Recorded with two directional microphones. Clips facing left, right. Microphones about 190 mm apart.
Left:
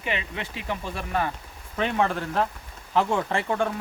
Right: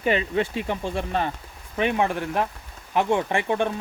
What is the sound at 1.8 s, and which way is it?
Speech, 15° right (ahead or behind).